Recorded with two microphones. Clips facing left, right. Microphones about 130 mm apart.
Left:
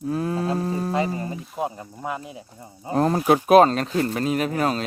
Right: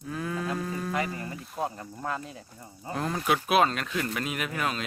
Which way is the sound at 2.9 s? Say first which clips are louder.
Left 9 dB; 40° left (ahead or behind).